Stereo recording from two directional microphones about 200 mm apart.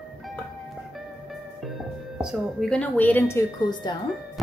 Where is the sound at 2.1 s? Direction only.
Centre (ahead or behind); by 4.0 s 20° left (ahead or behind).